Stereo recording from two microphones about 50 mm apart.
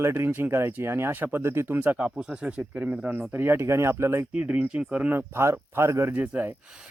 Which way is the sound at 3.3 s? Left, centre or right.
Right.